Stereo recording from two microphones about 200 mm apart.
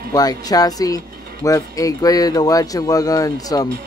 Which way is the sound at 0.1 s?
20° left (ahead or behind).